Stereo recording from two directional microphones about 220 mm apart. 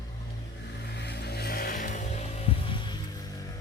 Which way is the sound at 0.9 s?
50° left (ahead or behind).